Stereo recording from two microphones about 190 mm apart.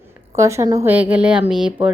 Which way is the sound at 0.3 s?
15° right (ahead or behind).